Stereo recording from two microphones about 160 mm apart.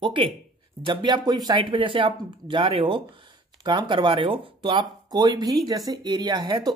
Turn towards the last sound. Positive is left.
turn(degrees=-25)  # may be behind; listen again after turning